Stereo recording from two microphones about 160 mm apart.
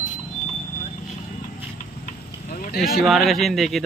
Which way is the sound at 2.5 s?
65° left (ahead or behind).